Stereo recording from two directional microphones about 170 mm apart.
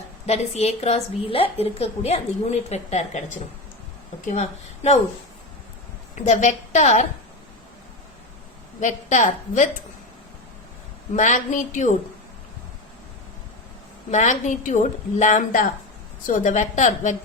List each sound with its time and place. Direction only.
0.3 s a woman's voice: 40° left (ahead or behind)
4.3 s a woman's voice: 40° left (ahead or behind)
6.1 s a woman's voice: 45° left (ahead or behind)
8.8 s a woman's voice: 45° left (ahead or behind)
11.1 s a woman's voice: 45° left (ahead or behind)
14.1 s a woman's voice: 45° left (ahead or behind)